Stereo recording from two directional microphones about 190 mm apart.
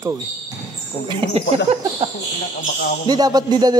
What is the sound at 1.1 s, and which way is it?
Speech, 30° right (ahead or behind).